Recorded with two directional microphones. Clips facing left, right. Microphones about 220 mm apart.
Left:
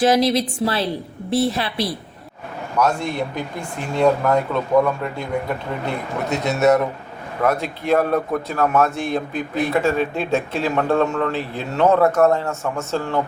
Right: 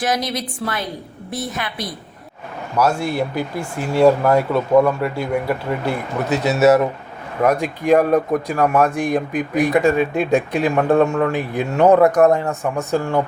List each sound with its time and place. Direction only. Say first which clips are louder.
0.0 s a woman's voice: left 6 dB; 25° left (ahead or behind)
2.7 s a man's voice: right 2 dB; 5° right (ahead or behind)